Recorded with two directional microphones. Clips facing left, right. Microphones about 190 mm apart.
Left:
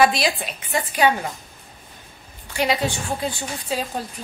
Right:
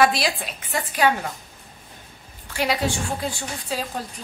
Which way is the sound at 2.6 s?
Centre (ahead or behind).